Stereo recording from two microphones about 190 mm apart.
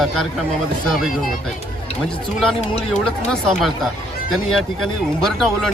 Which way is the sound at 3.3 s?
Centre (ahead or behind).